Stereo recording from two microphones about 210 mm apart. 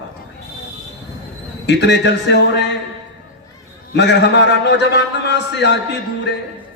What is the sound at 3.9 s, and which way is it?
A man's voice, 55° left (ahead or behind).